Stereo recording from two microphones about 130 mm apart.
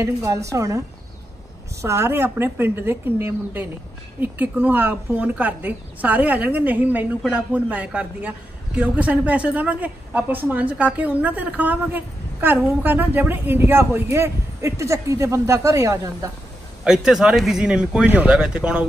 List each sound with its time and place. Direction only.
0.0 s a woman's voice: 25° right (ahead or behind)
16.8 s speech: 5° right (ahead or behind)